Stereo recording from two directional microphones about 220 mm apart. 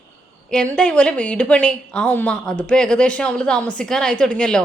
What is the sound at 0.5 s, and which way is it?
A woman's voice, 5° left (ahead or behind).